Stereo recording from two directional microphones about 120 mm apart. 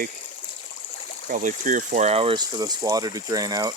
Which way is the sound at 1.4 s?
90° right.